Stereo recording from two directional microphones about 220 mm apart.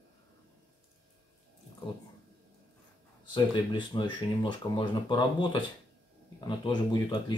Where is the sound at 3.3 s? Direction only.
20° left (ahead or behind).